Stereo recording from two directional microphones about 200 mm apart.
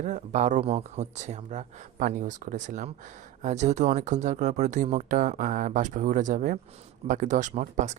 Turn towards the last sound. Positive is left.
turn(degrees=-35)  # may be behind; listen again after turning